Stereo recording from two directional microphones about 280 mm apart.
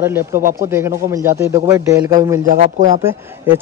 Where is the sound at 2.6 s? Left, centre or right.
Right.